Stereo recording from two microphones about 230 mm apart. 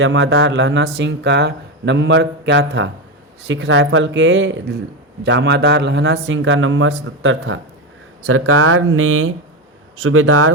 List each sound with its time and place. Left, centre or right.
0.0 s speech: right
8.3 s speech: right